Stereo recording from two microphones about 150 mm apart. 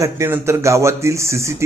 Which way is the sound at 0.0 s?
20° right (ahead or behind).